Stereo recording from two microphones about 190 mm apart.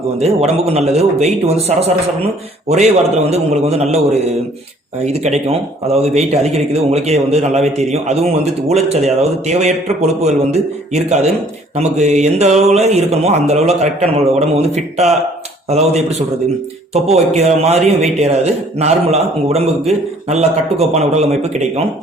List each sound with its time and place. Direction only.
0.2 s a man's voice: 35° right (ahead or behind)
5.0 s a man's voice: 35° right (ahead or behind)